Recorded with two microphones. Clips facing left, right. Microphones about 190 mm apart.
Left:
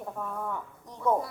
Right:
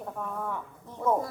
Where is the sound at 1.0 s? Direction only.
45° right (ahead or behind).